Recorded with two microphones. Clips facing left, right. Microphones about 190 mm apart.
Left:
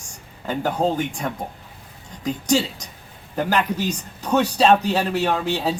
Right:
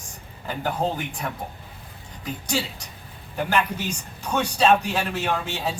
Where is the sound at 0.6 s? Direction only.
45° left (ahead or behind).